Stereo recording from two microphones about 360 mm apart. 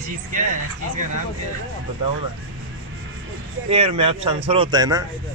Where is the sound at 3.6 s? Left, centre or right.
Centre.